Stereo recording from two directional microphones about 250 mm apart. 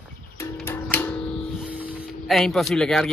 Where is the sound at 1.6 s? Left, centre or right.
Centre.